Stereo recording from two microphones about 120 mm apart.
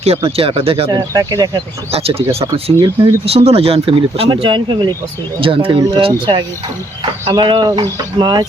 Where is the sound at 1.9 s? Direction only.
55° right (ahead or behind).